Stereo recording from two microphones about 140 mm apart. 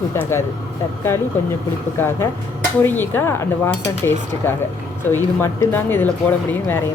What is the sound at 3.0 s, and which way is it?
Dishes, 15° left (ahead or behind).